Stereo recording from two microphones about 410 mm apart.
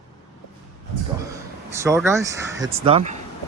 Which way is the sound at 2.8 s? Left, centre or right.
Centre.